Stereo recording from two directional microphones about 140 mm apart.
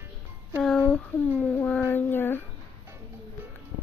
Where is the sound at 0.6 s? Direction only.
5° left (ahead or behind).